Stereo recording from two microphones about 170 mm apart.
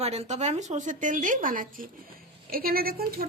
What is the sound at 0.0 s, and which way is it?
A woman's voice, 40° right (ahead or behind).